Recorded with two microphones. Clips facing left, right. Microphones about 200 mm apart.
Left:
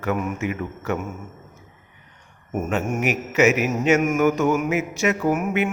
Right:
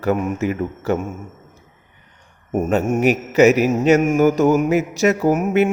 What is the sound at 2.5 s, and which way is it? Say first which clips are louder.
Mantra: right 6 dB; 35° right (ahead or behind).